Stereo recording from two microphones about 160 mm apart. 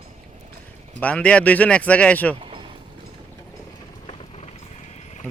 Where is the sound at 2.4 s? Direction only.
35° right (ahead or behind).